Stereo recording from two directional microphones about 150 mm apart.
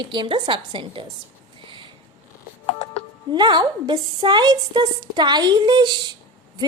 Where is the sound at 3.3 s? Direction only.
30° right (ahead or behind).